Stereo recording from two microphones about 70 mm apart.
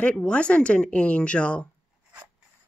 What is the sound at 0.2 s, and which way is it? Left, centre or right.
Speech, centre.